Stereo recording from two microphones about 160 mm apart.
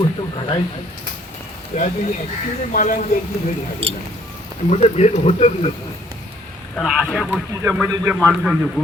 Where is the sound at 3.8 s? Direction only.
35° right (ahead or behind).